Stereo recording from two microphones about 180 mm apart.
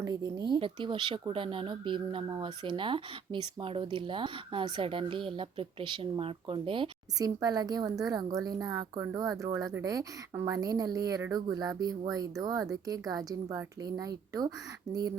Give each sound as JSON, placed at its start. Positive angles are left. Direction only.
{"t": 0.0, "sound": "speech", "side_deg": -20}